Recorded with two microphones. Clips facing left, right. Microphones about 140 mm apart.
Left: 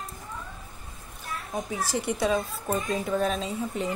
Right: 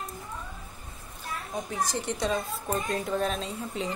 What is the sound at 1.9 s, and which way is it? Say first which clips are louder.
Mantra: left 7 dB; 10° left (ahead or behind).